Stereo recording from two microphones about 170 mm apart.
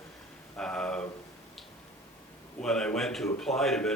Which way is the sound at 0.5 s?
5° left (ahead or behind).